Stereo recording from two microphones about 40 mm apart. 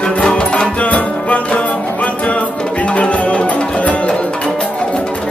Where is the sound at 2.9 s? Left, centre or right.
Left.